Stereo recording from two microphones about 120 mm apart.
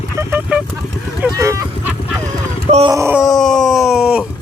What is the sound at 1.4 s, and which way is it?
Speech, 25° right (ahead or behind).